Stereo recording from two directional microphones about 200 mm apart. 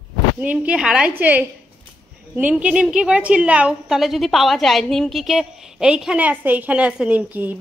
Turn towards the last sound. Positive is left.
turn(degrees=-10)  # may be behind; listen again after turning